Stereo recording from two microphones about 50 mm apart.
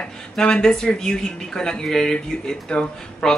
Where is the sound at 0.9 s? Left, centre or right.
Centre.